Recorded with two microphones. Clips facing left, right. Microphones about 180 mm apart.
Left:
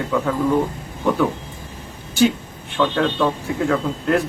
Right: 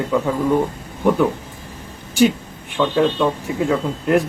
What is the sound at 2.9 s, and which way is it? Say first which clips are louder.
Speech: right 2 dB; 15° right (ahead or behind).